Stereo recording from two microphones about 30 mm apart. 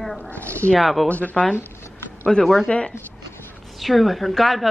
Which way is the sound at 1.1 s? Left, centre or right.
Left.